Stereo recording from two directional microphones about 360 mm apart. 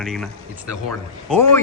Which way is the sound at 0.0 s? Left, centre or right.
Centre.